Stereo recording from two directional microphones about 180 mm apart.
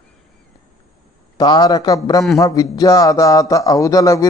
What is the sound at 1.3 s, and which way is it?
A man's voice, 20° left (ahead or behind).